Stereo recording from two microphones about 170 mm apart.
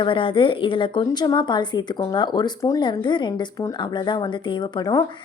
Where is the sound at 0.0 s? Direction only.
30° left (ahead or behind).